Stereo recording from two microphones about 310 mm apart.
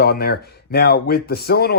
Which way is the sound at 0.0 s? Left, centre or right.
Left.